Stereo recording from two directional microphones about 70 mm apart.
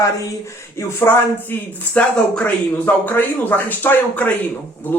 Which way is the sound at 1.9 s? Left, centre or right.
Left.